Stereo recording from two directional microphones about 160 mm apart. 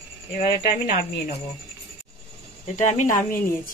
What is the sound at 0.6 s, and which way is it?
Speech, 90° left.